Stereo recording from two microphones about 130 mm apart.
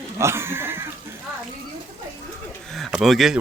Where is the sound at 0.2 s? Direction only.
20° right (ahead or behind).